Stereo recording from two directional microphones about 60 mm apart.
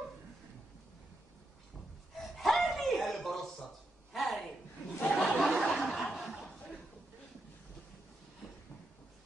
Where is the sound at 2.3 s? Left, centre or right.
Centre.